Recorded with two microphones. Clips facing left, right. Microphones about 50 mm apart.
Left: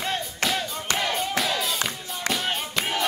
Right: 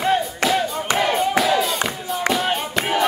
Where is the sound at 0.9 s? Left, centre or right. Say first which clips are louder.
Right 7 dB; centre.